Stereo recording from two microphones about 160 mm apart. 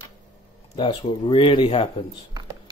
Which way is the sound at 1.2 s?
30° left (ahead or behind).